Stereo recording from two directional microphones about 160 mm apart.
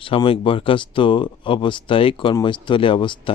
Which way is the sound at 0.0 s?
35° left (ahead or behind).